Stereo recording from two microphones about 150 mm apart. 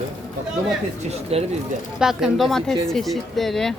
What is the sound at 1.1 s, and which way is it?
Speech, 45° right (ahead or behind).